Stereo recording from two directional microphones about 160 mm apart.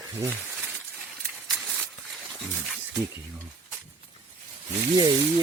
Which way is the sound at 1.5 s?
Centre (ahead or behind).